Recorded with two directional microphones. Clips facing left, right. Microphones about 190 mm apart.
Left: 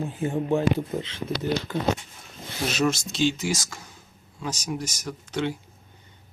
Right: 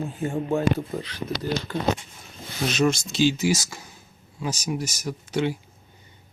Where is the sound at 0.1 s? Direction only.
15° left (ahead or behind).